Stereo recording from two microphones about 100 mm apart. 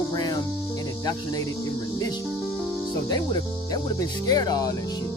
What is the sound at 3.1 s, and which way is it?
Speech, 45° left (ahead or behind).